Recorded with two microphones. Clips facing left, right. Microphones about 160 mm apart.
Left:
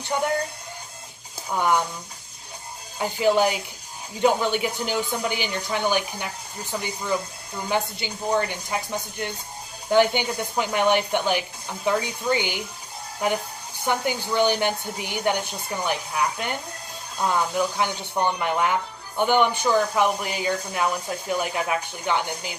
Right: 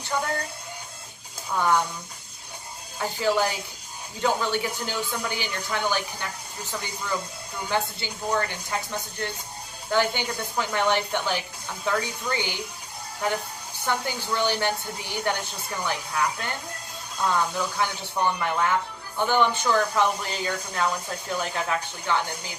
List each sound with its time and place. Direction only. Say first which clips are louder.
0.1 s speech: left 3 dB; 20° left (ahead or behind)
1.5 s speech: left 1 dB; 15° left (ahead or behind)
3.0 s speech: left 4 dB; 15° left (ahead or behind)
13.8 s speech: left 3 dB; 15° left (ahead or behind)